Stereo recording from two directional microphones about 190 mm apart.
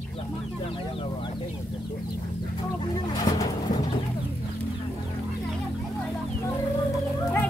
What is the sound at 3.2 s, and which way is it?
Pigeon, 20° left (ahead or behind).